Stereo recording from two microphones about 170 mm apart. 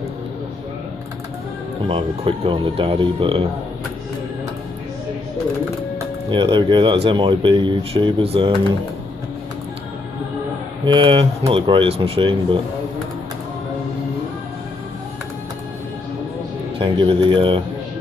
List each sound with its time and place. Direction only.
1.9 s speech: 30° right (ahead or behind)
6.3 s speech: 30° right (ahead or behind)
10.9 s speech: 30° right (ahead or behind)
16.7 s speech: 30° right (ahead or behind)